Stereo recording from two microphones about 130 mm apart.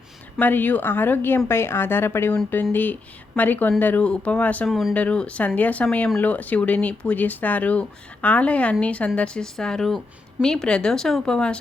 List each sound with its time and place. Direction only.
0.3 s speech: 15° left (ahead or behind)
4.7 s speech: centre (ahead or behind)
4.9 s speech: 10° left (ahead or behind)